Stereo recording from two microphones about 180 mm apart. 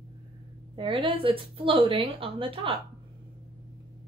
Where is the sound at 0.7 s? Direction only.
30° right (ahead or behind).